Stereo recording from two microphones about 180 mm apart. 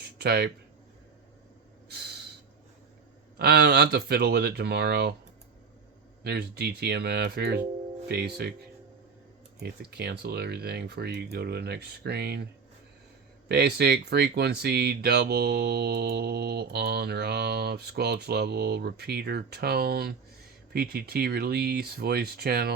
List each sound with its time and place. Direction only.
0.0 s a sound: 65° right (ahead or behind)
3.3 s speech: 65° right (ahead or behind)
6.2 s speech: 65° right (ahead or behind)
9.6 s speech: 65° right (ahead or behind)
13.5 s speech: 65° right (ahead or behind)